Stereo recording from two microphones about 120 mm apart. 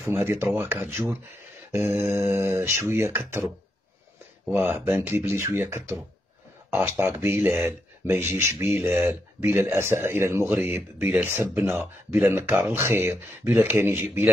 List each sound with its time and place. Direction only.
0.0 s speech: 20° right (ahead or behind)
4.5 s speech: 15° right (ahead or behind)